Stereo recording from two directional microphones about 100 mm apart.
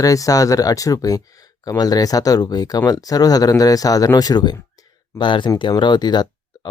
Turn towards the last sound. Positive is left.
turn(degrees=45)  # may be behind; listen again after turning